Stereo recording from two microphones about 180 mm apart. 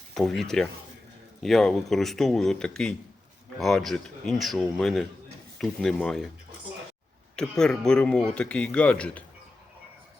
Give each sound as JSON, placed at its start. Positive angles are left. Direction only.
{"t": 0.1, "sound": "speech", "side_deg": 0}
{"t": 7.5, "sound": "speech", "side_deg": 5}